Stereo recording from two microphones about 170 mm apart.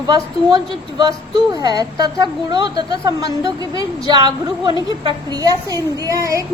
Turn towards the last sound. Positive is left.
turn(degrees=-20)  # may be behind; listen again after turning